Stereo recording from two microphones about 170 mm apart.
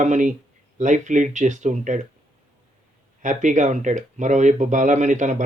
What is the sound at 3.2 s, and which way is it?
Speech, 45° right (ahead or behind).